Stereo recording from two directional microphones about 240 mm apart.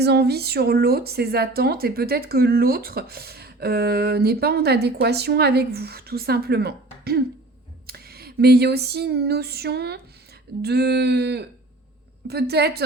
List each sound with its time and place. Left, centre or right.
0.0 s a woman's voice: right
7.9 s a sound: right
10.6 s speech: right